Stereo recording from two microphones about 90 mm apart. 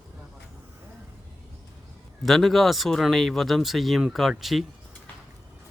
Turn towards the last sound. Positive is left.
turn(degrees=0)  # may be behind; listen again after turning